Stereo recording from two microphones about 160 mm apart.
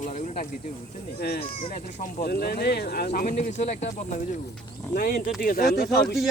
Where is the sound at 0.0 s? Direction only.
50° left (ahead or behind).